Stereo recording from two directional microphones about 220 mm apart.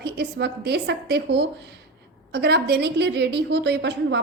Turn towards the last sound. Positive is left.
turn(degrees=-50)  # may be behind; listen again after turning